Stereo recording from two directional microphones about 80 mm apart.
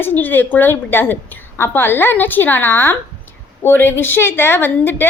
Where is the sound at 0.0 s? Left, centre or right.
Left.